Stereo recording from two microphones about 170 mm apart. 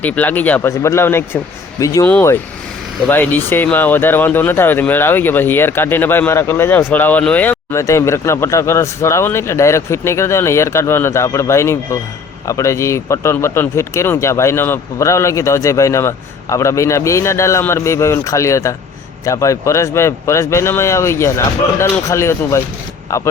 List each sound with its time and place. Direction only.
0.0 s speech: 10° left (ahead or behind)